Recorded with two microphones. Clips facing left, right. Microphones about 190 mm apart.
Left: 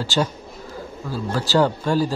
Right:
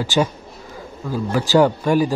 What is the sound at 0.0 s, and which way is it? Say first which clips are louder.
Speech: right 3 dB; 15° right (ahead or behind).